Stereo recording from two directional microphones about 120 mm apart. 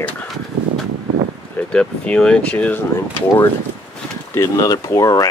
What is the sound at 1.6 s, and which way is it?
Speech, 10° left (ahead or behind).